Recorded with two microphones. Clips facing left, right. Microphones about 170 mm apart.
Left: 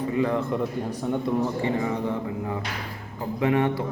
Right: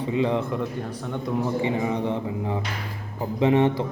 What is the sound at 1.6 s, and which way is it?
Speech, 20° right (ahead or behind).